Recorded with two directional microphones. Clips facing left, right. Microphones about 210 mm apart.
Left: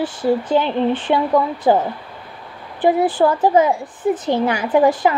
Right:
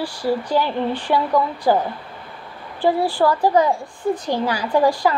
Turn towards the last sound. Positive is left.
turn(degrees=20)  # may be behind; listen again after turning